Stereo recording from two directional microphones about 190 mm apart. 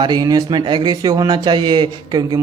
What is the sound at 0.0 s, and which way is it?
Speech, 20° right (ahead or behind).